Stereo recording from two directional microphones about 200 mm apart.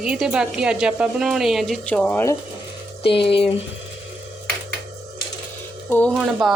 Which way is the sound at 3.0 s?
25° left (ahead or behind).